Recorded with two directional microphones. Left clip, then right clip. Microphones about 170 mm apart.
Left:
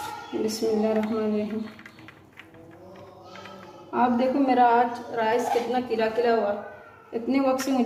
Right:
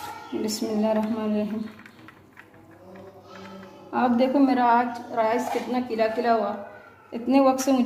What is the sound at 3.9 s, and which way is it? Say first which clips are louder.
A woman's voice: right 1 dB; 55° right (ahead or behind).